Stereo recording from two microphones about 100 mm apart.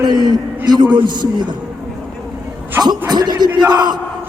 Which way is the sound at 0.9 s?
45° right (ahead or behind).